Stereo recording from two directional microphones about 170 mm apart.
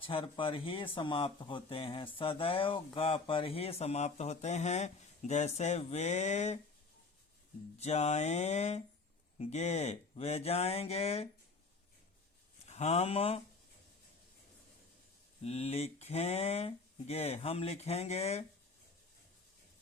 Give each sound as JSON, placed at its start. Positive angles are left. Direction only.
{"t": 0.0, "sound": "speech", "side_deg": 30}
{"t": 7.8, "sound": "speech", "side_deg": 40}
{"t": 12.6, "sound": "speech", "side_deg": 40}
{"t": 15.4, "sound": "speech", "side_deg": 40}